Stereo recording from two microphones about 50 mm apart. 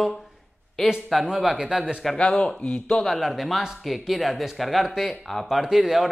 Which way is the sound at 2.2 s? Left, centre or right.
Centre.